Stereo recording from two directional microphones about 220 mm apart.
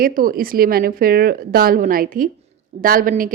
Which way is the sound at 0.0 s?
40° right (ahead or behind).